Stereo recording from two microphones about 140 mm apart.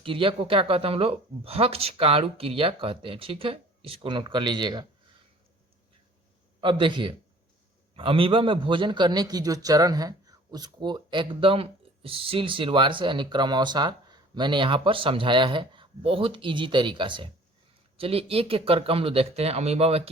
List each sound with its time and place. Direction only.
0.0 s a man's voice: 40° right (ahead or behind)
6.6 s a man's voice: 35° right (ahead or behind)